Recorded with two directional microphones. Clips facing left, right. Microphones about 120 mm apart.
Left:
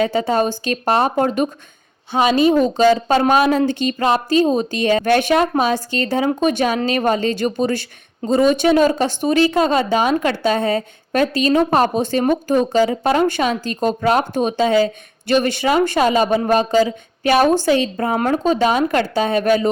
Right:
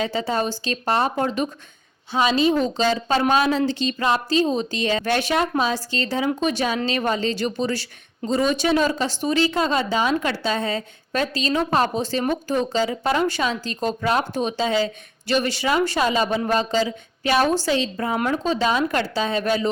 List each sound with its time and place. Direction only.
0.0 s a woman's voice: 50° left (ahead or behind)
12.9 s a woman's voice: 40° left (ahead or behind)
13.7 s a woman's voice: 45° left (ahead or behind)